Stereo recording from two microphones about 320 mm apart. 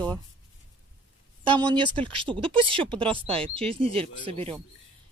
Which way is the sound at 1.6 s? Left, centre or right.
Centre.